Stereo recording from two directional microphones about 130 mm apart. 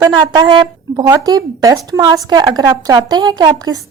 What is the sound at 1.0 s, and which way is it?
A woman's voice, 25° right (ahead or behind).